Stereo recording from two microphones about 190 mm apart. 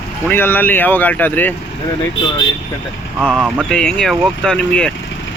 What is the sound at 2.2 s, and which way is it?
Speech, 90° left.